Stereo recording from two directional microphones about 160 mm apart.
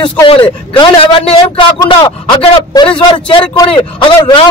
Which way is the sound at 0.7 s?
30° left (ahead or behind).